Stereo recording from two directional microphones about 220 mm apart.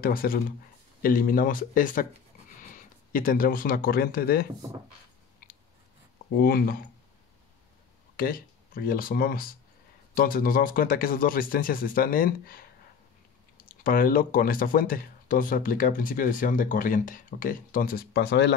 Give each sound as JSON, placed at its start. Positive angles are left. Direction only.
{"t": 0.0, "sound": "speech", "side_deg": 40}
{"t": 3.1, "sound": "speech", "side_deg": 40}
{"t": 5.4, "sound": "chewing", "side_deg": 40}
{"t": 6.3, "sound": "speech", "side_deg": 40}
{"t": 8.2, "sound": "speech", "side_deg": 40}
{"t": 13.8, "sound": "speech", "side_deg": 40}